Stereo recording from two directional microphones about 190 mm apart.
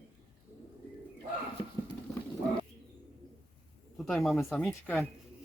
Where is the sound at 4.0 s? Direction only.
Centre (ahead or behind).